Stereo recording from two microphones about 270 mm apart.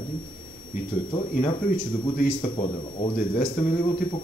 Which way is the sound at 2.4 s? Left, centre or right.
Left.